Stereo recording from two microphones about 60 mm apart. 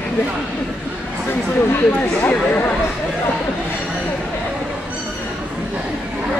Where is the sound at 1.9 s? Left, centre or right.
Left.